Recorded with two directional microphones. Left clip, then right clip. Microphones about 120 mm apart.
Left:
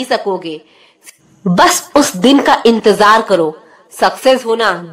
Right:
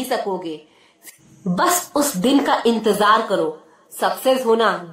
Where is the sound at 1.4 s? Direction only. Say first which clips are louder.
Left 9 dB; 50° left (ahead or behind).